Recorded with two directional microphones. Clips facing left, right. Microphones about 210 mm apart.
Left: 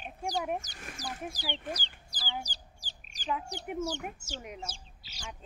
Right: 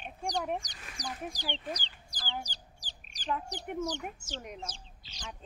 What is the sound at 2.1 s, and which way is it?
Chicken, 5° left (ahead or behind).